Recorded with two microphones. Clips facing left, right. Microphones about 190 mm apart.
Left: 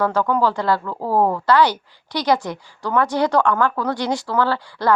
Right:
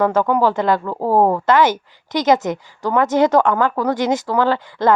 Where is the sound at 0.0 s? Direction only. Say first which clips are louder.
Right 3 dB; 20° right (ahead or behind).